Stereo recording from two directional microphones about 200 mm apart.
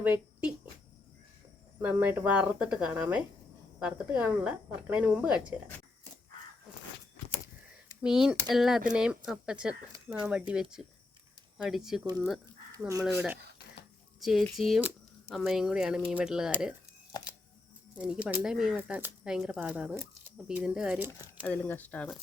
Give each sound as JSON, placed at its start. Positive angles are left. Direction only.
{"t": 0.0, "sound": "a sound", "side_deg": -10}
{"t": 1.8, "sound": "speech", "side_deg": -10}
{"t": 8.0, "sound": "speech", "side_deg": -5}
{"t": 12.9, "sound": "speech", "side_deg": -15}
{"t": 14.2, "sound": "speech", "side_deg": 0}
{"t": 17.9, "sound": "speech", "side_deg": -5}
{"t": 21.4, "sound": "speech", "side_deg": 10}